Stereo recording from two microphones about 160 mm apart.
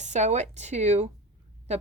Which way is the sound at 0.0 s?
45° right (ahead or behind).